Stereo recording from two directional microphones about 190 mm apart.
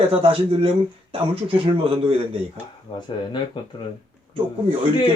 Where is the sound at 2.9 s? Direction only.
30° left (ahead or behind).